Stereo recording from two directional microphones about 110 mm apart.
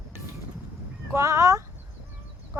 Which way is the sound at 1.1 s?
25° right (ahead or behind).